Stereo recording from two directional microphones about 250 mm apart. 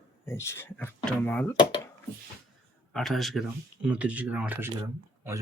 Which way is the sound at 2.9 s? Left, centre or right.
Centre.